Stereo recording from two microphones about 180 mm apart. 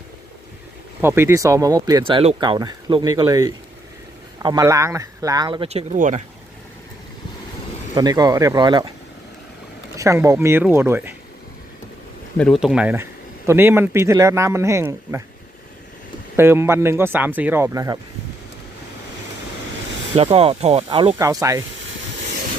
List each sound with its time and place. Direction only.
1.0 s speech: 15° right (ahead or behind); by 6.2 s 40° right (ahead or behind)
7.9 s speech: 20° right (ahead or behind)
10.0 s speech: 15° right (ahead or behind)
12.4 s speech: centre (ahead or behind)
16.4 s speech: 15° right (ahead or behind)
20.1 s speech: 35° right (ahead or behind)
21.2 s speech: 20° right (ahead or behind)